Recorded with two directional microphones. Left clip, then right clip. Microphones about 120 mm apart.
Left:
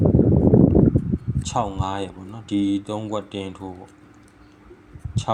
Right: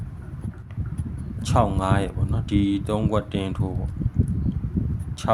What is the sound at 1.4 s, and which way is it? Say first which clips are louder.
Speech: right 3 dB; 30° right (ahead or behind).